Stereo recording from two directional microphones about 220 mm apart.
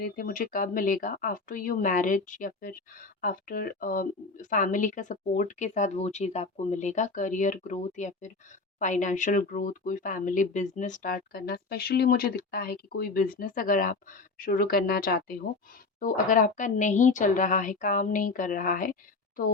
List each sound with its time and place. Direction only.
0.0 s speech: 40° left (ahead or behind)